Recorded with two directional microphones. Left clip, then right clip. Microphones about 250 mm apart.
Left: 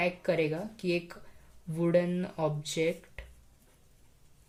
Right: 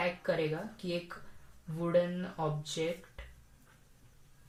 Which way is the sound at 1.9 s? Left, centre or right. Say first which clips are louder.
Left 1 dB; left.